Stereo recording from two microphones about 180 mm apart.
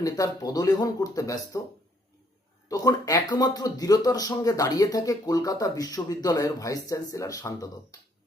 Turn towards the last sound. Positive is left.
turn(degrees=20)  # may be behind; listen again after turning